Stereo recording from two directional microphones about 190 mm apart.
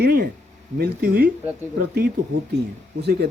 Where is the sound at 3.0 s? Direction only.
60° right (ahead or behind).